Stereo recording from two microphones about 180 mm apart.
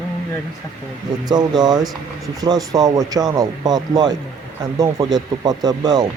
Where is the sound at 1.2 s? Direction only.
25° right (ahead or behind).